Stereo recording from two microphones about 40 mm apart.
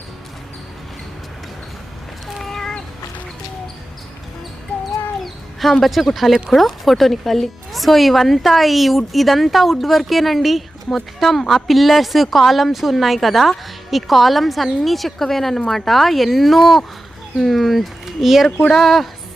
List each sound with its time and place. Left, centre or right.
2.4 s cat: centre
5.2 s a sound: centre
5.8 s speech: centre